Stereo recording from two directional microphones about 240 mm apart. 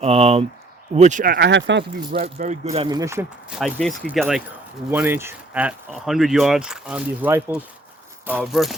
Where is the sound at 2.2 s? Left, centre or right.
Right.